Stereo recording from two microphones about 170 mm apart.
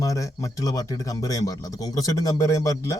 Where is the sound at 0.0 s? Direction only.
20° left (ahead or behind).